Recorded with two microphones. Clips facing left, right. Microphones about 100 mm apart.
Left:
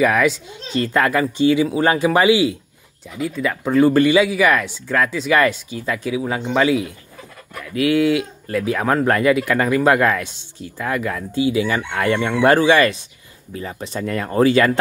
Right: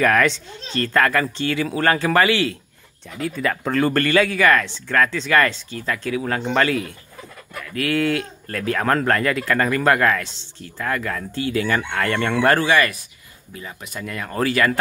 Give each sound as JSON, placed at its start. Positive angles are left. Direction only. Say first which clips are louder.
{"t": 0.0, "sound": "speech", "louder": "left 1 dB", "side_deg": 10}
{"t": 3.2, "sound": "speech", "louder": "left 1 dB", "side_deg": 5}